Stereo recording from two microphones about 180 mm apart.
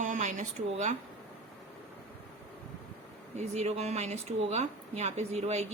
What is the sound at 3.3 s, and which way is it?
Speech, 40° right (ahead or behind).